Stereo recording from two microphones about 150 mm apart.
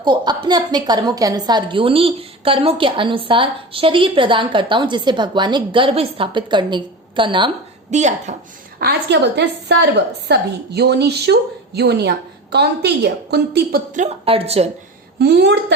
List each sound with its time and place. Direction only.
0.0 s a woman's voice: 30° right (ahead or behind)
7.9 s speech: 50° right (ahead or behind)
8.8 s a woman's voice: 85° right
14.3 s a woman's voice: 40° right (ahead or behind)
15.2 s a woman's voice: 90° right